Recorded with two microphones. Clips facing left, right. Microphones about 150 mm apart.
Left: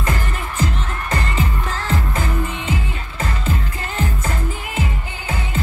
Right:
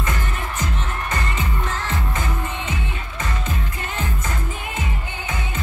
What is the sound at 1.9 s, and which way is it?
Music, 30° left (ahead or behind).